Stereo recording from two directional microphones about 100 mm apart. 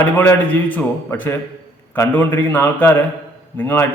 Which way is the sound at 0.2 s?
20° left (ahead or behind).